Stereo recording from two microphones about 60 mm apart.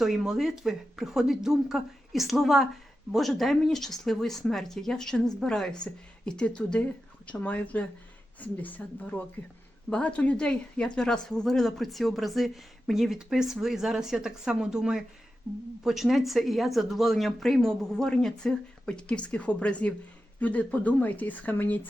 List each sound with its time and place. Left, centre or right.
0.0 s a woman's voice: centre; by 21.8 s left